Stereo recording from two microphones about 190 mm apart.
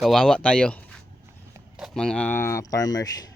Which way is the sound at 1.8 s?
Centre (ahead or behind).